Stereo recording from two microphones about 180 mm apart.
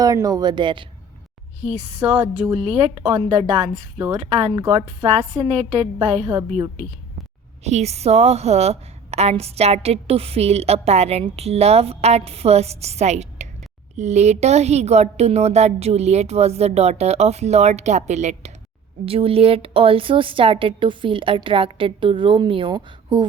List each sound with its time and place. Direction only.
0.0 s a woman's voice: 20° right (ahead or behind)
1.6 s a woman's voice: 35° right (ahead or behind)
3.9 s a woman's voice: 15° right (ahead or behind)
4.2 s a woman's voice: 35° right (ahead or behind)